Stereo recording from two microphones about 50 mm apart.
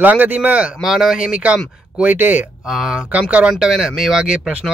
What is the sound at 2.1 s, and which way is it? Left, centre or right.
Speech, right.